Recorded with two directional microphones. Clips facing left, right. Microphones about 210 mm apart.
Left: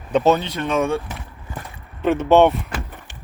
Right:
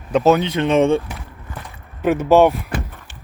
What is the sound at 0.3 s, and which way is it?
Speech, 20° right (ahead or behind).